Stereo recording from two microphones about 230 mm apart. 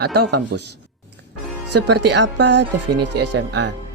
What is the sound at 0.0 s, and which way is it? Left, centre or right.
Speech, right.